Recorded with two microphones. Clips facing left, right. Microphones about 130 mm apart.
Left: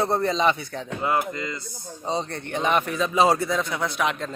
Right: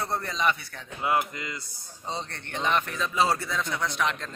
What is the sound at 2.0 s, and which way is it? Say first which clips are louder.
Speech: left 7 dB; 15° left (ahead or behind).